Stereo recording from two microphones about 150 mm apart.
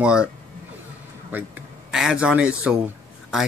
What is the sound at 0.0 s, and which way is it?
Speech, 5° right (ahead or behind).